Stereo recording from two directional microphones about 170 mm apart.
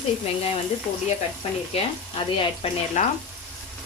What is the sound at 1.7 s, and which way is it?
Frying, 35° left (ahead or behind).